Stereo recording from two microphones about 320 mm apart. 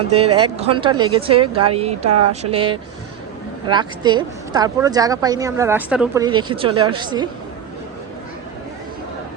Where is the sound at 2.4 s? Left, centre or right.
Centre.